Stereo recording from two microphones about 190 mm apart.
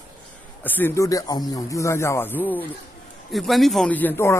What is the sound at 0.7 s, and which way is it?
Speech, 10° left (ahead or behind).